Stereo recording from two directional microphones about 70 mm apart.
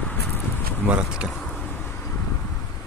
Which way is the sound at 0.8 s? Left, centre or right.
Centre.